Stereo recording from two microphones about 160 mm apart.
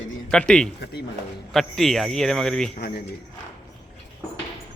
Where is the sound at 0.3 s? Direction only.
5° left (ahead or behind).